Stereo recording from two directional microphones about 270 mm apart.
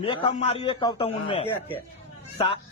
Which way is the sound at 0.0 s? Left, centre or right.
Centre.